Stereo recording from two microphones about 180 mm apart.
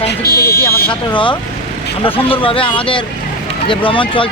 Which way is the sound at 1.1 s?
25° left (ahead or behind).